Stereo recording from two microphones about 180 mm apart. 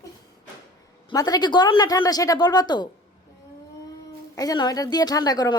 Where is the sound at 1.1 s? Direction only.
20° left (ahead or behind).